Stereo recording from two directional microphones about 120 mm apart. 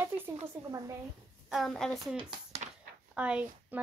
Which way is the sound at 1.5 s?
Centre (ahead or behind).